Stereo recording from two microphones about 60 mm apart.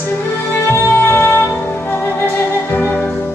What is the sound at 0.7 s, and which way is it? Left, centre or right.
Music, left.